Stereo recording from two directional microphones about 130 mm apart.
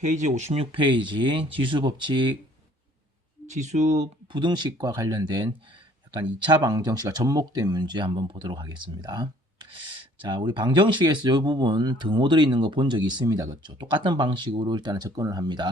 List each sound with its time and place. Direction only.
0.2 s speech: 65° right (ahead or behind); by 2.4 s 40° right (ahead or behind)
3.5 s speech: 65° right (ahead or behind)
4.3 s speech: 35° right (ahead or behind)